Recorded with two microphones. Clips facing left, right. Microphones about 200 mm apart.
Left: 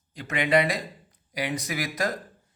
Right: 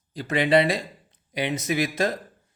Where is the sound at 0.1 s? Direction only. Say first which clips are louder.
Right 3 dB; 35° right (ahead or behind).